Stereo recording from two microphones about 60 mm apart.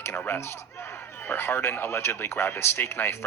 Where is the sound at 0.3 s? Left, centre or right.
Left.